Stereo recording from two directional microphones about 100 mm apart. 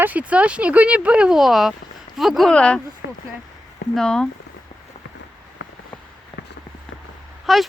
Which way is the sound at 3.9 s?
5° left (ahead or behind).